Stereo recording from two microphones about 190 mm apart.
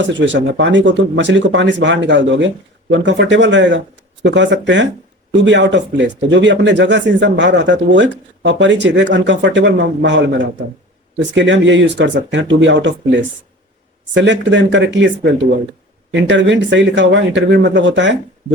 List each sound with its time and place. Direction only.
0.0 s speech: 70° right (ahead or behind)